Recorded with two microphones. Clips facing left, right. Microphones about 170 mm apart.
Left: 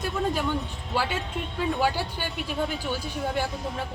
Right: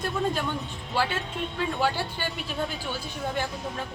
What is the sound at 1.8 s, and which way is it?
Speech, 10° left (ahead or behind).